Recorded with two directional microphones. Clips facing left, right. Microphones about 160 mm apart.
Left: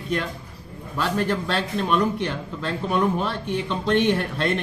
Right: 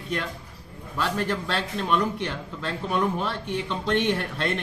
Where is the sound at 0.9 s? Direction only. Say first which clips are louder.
Left 3 dB; 50° left (ahead or behind).